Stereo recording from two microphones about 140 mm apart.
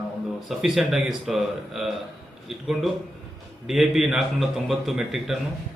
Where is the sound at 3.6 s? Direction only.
Centre (ahead or behind).